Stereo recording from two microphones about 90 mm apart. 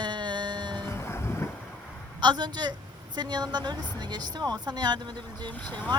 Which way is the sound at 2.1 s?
55° right (ahead or behind).